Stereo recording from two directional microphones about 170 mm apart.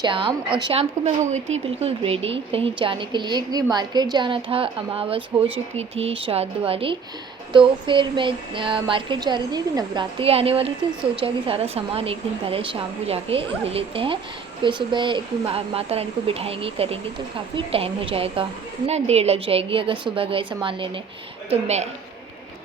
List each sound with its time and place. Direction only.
0.0 s a woman's voice: 30° right (ahead or behind)
21.5 s speech: 40° right (ahead or behind)